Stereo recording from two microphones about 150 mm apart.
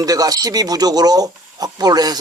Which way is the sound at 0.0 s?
25° right (ahead or behind).